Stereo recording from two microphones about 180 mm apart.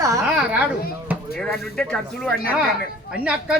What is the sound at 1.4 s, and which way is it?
Speech, 5° left (ahead or behind).